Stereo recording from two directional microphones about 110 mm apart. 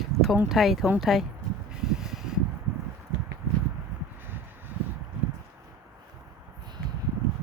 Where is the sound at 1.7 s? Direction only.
5° right (ahead or behind).